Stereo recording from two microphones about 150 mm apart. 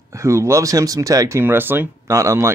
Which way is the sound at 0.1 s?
20° right (ahead or behind).